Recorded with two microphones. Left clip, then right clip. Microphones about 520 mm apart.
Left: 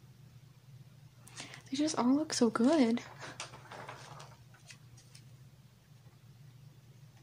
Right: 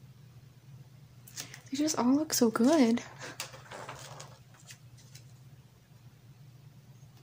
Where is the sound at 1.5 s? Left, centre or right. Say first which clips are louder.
Right 2 dB; left.